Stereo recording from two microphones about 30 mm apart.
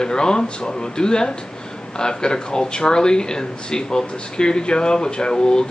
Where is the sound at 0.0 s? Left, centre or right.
Left.